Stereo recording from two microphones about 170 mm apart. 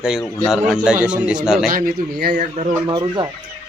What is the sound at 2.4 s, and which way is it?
Speech, 45° right (ahead or behind).